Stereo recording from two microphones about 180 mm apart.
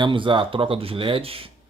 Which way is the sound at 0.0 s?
25° right (ahead or behind).